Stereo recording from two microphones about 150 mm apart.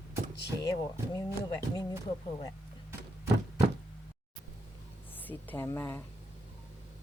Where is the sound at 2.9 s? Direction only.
20° right (ahead or behind).